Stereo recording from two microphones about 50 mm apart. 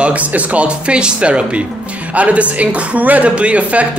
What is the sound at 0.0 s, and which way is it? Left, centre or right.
A man's voice, right.